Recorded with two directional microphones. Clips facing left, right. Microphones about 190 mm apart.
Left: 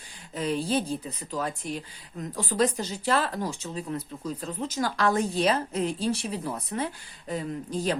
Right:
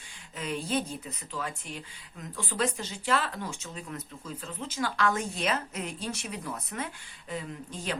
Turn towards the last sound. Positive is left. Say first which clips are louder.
# left 7 dB
turn(degrees=35)  # may be behind; listen again after turning